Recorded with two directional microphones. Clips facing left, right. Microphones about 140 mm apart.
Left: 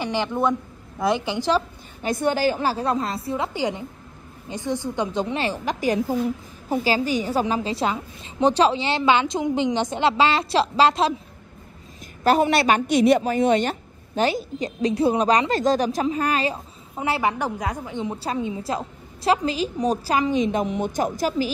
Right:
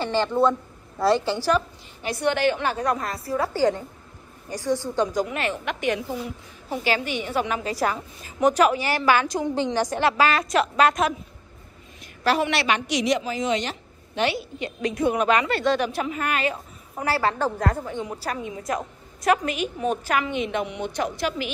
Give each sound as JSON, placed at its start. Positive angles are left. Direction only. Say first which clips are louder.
{"t": 0.0, "sound": "a woman's voice", "louder": "right 2 dB", "side_deg": 15}
{"t": 2.1, "sound": "a woman's voice", "louder": "even", "side_deg": 40}
{"t": 12.3, "sound": "a woman's voice", "louder": "left 4 dB", "side_deg": 45}
{"t": 16.9, "sound": "a woman's voice", "louder": "left 1 dB", "side_deg": 20}